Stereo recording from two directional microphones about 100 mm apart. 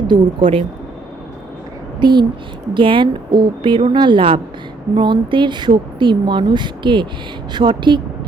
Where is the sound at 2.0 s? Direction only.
50° right (ahead or behind).